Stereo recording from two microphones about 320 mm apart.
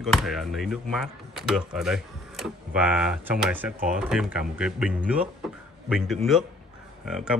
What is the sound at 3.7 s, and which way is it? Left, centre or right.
Speech, right.